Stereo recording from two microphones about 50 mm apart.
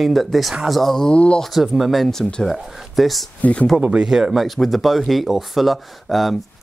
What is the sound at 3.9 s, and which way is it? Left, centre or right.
Speech, right.